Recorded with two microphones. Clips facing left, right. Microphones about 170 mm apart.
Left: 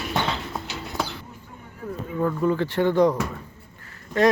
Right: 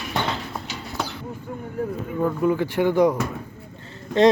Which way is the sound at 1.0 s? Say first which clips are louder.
Even; centre (ahead or behind).